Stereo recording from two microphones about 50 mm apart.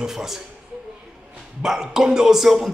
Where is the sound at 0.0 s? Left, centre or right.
Centre.